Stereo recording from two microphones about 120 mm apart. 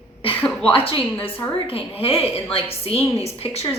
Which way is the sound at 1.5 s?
50° left (ahead or behind).